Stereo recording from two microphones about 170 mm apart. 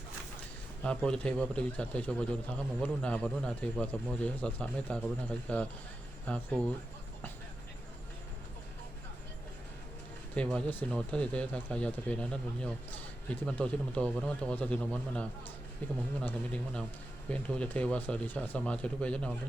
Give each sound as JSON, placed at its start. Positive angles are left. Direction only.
{"t": 0.8, "sound": "a man's voice", "side_deg": 5}
{"t": 10.3, "sound": "a man's voice", "side_deg": 5}